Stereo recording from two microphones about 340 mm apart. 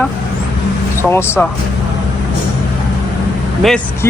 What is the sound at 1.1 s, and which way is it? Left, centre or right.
Speech, centre.